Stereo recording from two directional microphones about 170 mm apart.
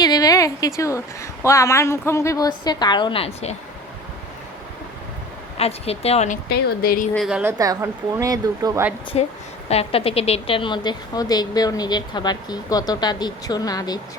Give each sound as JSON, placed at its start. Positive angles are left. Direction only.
{"t": 0.0, "sound": "a woman's voice", "side_deg": 20}
{"t": 5.5, "sound": "speech", "side_deg": 35}
{"t": 6.5, "sound": "speech", "side_deg": 65}
{"t": 7.3, "sound": "a woman's voice", "side_deg": -5}
{"t": 7.6, "sound": "speech", "side_deg": -20}
{"t": 9.1, "sound": "a woman's voice", "side_deg": 35}